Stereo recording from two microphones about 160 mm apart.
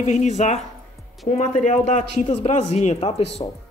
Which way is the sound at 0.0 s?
45° left (ahead or behind).